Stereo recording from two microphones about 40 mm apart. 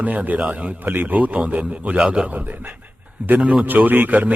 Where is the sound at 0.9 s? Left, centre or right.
Right.